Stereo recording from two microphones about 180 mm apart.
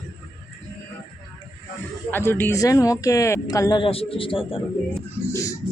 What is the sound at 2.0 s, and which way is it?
Speech, 10° left (ahead or behind).